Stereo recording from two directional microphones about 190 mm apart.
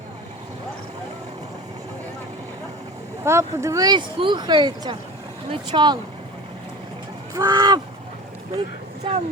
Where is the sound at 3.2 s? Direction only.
15° right (ahead or behind).